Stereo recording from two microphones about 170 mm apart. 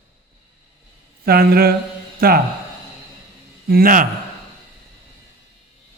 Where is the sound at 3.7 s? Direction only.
60° right (ahead or behind).